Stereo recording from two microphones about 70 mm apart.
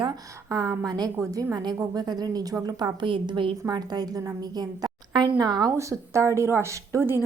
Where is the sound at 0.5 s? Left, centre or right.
Right.